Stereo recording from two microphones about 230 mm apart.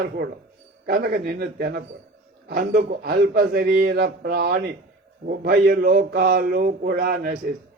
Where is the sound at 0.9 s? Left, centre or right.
Right.